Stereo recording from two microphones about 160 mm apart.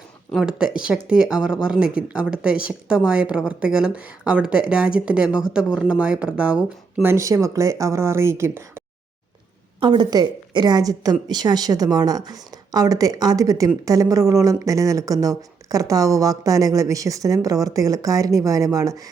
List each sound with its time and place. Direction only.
0.3 s speech: 5° right (ahead or behind)
9.8 s a woman's voice: 30° right (ahead or behind)